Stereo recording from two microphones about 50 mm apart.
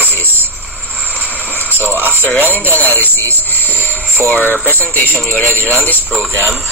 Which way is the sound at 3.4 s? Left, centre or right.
Left.